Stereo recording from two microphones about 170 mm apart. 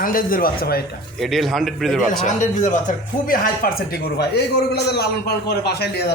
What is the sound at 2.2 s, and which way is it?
Speech, 45° left (ahead or behind).